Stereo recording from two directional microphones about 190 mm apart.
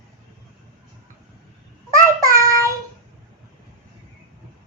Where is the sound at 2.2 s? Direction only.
15° right (ahead or behind).